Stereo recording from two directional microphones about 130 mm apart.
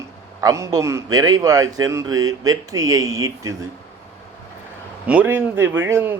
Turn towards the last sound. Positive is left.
turn(degrees=-15)  # may be behind; listen again after turning